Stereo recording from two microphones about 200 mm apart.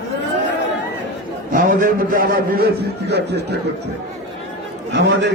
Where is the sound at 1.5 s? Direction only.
45° right (ahead or behind).